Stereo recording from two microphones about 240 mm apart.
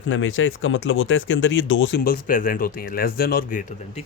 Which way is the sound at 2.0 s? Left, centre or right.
Left.